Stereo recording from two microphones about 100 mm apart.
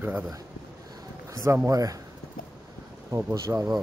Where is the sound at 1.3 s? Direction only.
30° right (ahead or behind).